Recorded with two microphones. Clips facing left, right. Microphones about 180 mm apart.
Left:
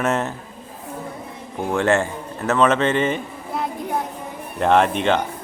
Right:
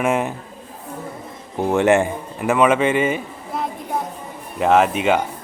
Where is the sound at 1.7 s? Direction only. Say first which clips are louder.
Right 3 dB; 15° right (ahead or behind).